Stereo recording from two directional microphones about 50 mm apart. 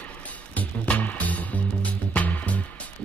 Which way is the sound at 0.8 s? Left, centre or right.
Left.